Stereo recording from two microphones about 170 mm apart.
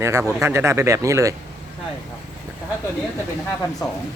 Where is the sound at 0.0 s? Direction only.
15° right (ahead or behind).